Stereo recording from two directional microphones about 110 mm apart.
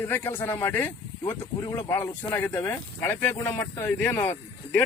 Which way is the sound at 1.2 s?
35° left (ahead or behind).